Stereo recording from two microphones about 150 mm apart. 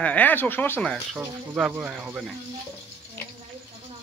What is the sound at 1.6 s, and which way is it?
Speech, 5° right (ahead or behind).